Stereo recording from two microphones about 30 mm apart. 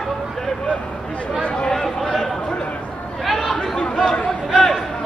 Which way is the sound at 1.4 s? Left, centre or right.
Left.